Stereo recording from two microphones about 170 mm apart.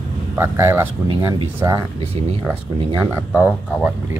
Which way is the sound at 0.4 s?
15° right (ahead or behind).